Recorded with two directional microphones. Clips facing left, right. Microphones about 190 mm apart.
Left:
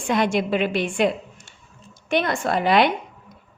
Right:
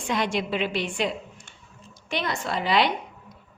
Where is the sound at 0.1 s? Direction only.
50° left (ahead or behind).